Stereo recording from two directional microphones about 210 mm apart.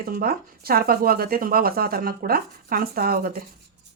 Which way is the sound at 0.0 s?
45° right (ahead or behind).